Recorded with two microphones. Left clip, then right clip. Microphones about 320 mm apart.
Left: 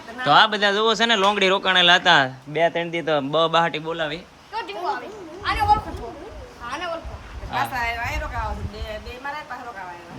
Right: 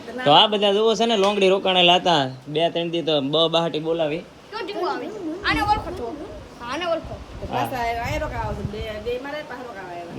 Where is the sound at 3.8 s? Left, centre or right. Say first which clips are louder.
Right 4 dB; left.